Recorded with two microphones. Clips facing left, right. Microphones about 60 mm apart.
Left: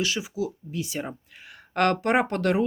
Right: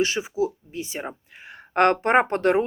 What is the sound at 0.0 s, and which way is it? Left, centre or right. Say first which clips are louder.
Speech: right 4 dB; right.